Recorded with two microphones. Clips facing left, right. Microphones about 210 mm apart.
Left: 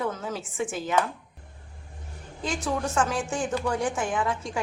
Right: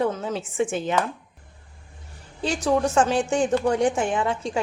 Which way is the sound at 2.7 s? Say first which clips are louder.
Right 7 dB; 30° right (ahead or behind).